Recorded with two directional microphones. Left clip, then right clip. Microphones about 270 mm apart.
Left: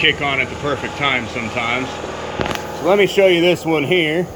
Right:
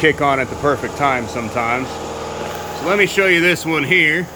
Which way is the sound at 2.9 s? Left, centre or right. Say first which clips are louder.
Left 2 dB; centre.